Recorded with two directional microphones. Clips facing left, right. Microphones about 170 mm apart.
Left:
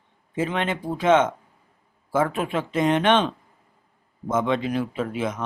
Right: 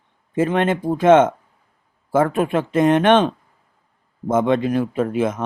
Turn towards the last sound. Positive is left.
turn(degrees=-50)  # may be behind; listen again after turning